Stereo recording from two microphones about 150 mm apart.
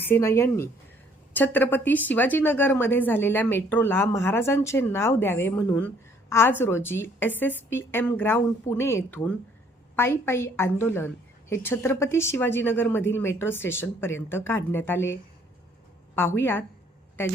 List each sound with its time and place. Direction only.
0.1 s a woman's voice: 15° left (ahead or behind)